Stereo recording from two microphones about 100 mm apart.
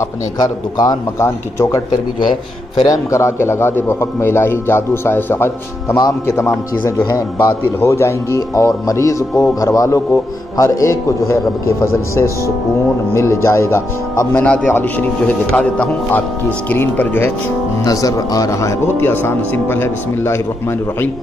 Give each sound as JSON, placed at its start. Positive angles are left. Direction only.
{"t": 0.4, "sound": "a man's voice", "side_deg": 40}
{"t": 1.2, "sound": "a man's voice", "side_deg": 30}
{"t": 2.8, "sound": "a man's voice", "side_deg": 35}
{"t": 14.3, "sound": "a man's voice", "side_deg": 15}
{"t": 17.8, "sound": "a man's voice", "side_deg": 35}